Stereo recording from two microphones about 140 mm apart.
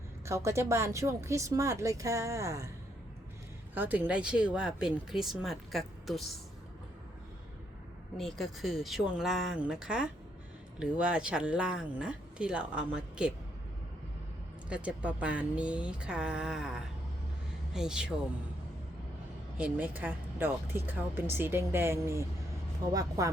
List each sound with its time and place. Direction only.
0.3 s speech: 20° right (ahead or behind)
3.8 s speech: 10° right (ahead or behind)
8.2 s speech: centre (ahead or behind)
14.7 s speech: 10° right (ahead or behind)
17.7 s speech: 5° right (ahead or behind)
19.5 s speech: 10° right (ahead or behind)